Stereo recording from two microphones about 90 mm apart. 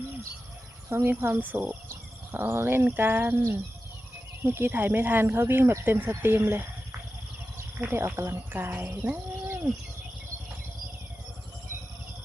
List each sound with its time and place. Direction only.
0.9 s speech: 25° right (ahead or behind)
7.8 s speech: 25° right (ahead or behind)